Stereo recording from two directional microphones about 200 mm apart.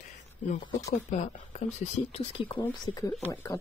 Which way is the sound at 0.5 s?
25° left (ahead or behind).